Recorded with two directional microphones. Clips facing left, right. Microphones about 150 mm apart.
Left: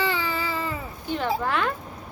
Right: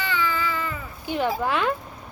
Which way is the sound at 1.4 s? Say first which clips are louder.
Right 1 dB; 10° right (ahead or behind).